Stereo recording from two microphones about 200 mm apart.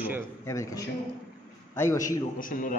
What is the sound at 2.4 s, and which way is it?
Speech, 45° left (ahead or behind).